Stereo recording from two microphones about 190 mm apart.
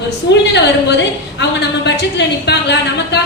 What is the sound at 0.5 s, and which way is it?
A woman's voice, 65° left (ahead or behind).